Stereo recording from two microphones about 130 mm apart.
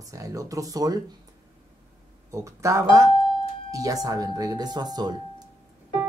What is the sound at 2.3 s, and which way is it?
Speech, 25° right (ahead or behind).